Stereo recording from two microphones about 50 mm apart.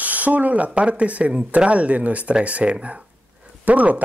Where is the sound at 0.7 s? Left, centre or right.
Right.